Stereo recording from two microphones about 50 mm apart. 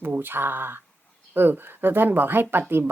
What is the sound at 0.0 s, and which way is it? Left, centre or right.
A woman's voice, right.